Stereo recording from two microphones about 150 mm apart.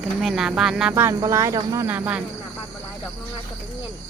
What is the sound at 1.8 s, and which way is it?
Speech, 10° right (ahead or behind).